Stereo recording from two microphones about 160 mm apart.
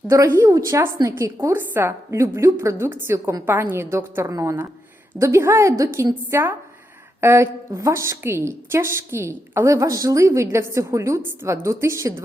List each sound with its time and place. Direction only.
0.1 s a woman's voice: 15° right (ahead or behind)